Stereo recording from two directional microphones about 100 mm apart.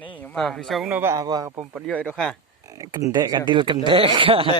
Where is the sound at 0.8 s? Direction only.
20° right (ahead or behind).